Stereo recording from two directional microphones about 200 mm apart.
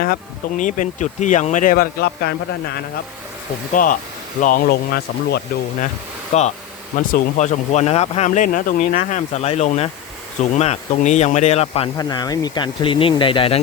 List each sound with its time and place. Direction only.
0.0 s speech: 45° left (ahead or behind)
6.3 s speech: 35° left (ahead or behind)
11.9 s speech: 20° left (ahead or behind)